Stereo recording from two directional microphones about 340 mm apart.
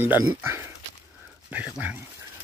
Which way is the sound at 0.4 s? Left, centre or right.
Centre.